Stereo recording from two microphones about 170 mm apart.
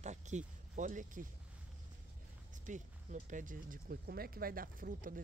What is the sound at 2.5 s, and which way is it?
Speech, 50° right (ahead or behind).